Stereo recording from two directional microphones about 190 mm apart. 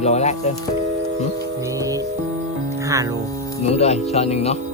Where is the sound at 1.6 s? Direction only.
15° right (ahead or behind).